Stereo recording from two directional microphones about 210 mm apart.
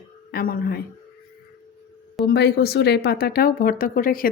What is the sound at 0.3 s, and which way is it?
Speech, 45° left (ahead or behind).